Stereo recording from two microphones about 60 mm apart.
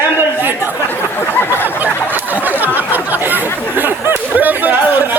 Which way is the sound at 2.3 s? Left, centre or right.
Right.